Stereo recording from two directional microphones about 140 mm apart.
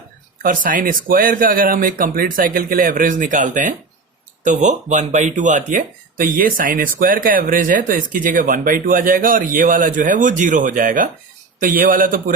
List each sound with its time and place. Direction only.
0.4 s a man's voice: 75° right (ahead or behind)